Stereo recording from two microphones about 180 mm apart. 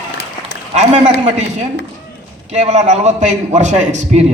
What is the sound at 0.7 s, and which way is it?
A man's voice, 40° right (ahead or behind).